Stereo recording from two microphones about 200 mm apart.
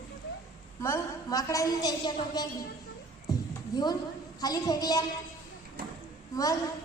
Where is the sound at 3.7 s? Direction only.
20° left (ahead or behind).